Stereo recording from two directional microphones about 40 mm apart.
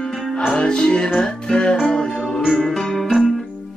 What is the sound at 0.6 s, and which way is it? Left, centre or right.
Music, centre.